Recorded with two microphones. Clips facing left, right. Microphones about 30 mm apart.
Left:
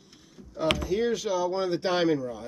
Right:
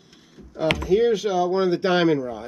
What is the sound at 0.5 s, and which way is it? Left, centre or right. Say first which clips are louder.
Speech: right 6 dB; centre.